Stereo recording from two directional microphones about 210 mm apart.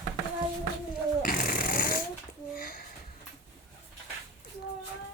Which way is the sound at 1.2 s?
40° left (ahead or behind).